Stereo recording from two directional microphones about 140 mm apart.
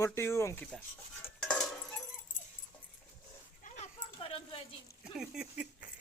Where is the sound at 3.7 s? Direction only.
45° left (ahead or behind).